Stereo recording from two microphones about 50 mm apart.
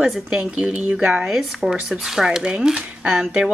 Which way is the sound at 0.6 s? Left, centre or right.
Centre.